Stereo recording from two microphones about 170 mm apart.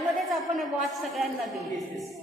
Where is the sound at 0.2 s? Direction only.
Centre (ahead or behind).